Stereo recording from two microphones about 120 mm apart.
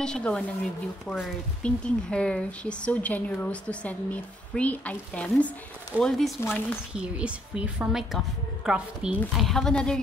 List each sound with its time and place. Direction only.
0.0 s a woman's voice: 5° left (ahead or behind)
6.4 s speech: 20° left (ahead or behind)
6.9 s a woman's voice: 10° right (ahead or behind)